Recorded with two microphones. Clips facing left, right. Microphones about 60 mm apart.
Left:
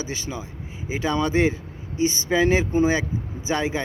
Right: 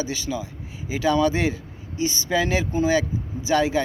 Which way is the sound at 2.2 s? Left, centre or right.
Left.